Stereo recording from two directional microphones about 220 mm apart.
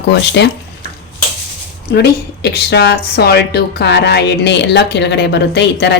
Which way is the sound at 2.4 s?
50° left (ahead or behind).